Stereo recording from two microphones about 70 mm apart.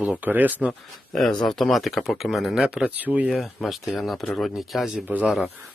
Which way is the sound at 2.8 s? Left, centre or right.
Right.